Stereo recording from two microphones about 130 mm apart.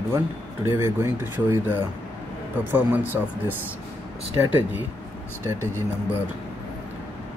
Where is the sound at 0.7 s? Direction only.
20° right (ahead or behind).